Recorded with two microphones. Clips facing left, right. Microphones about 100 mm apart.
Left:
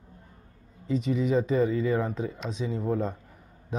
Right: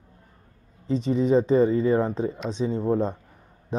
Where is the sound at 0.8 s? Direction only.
30° right (ahead or behind).